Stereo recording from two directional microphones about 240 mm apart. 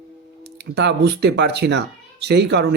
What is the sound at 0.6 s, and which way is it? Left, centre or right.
Speech, right.